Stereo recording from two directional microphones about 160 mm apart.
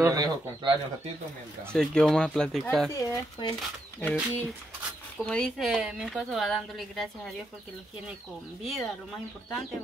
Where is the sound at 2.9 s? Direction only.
25° left (ahead or behind).